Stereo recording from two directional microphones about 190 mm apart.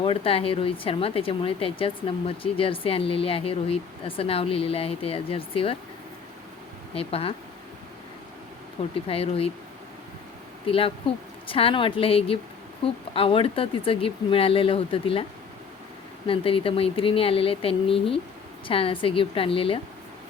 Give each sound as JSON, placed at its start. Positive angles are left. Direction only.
{"t": 0.0, "sound": "speech", "side_deg": 30}
{"t": 6.9, "sound": "speech", "side_deg": 30}
{"t": 9.0, "sound": "speech", "side_deg": 30}
{"t": 10.7, "sound": "speech", "side_deg": 30}